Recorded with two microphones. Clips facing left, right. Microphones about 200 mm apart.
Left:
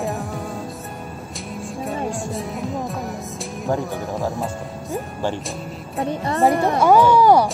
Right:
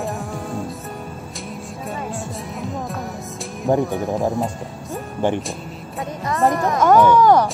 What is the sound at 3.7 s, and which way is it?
Speech, 20° right (ahead or behind).